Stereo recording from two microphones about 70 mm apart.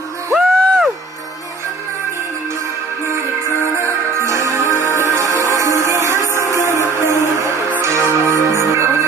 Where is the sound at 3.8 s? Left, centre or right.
Right.